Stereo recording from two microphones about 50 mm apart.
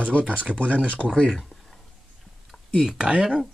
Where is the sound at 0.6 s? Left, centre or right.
Left.